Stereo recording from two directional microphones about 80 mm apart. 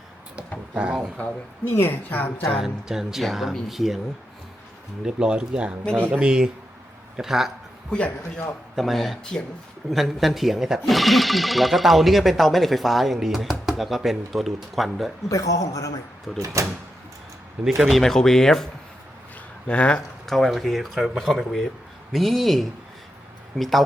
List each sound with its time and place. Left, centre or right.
0.7 s speech: centre
1.7 s a woman's voice: left
2.6 s speech: centre
5.0 s speech: centre
7.9 s a man's voice: centre
8.7 s speech: centre
15.3 s a man's voice: left
16.4 s speech: right
17.6 s speech: centre
20.2 s speech: centre